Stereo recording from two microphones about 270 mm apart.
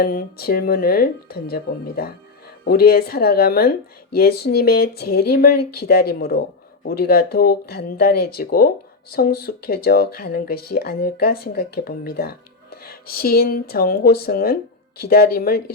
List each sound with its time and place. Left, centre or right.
0.0 s speech: left